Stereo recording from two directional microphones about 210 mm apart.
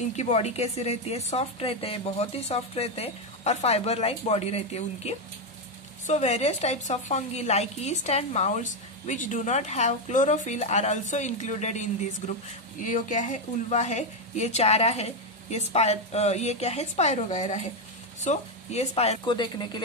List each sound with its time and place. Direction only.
0.1 s a woman's voice: 30° left (ahead or behind)